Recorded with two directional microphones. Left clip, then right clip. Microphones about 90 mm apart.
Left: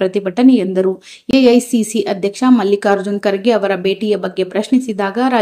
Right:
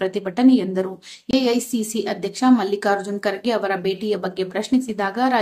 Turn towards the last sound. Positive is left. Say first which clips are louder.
# left 5 dB
turn(degrees=40)  # may be behind; listen again after turning